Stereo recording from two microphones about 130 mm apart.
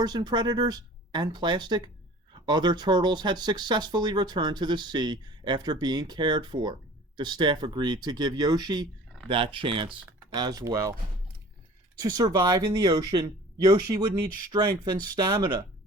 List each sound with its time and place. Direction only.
0.0 s speech: 35° right (ahead or behind)
11.9 s speech: 30° right (ahead or behind)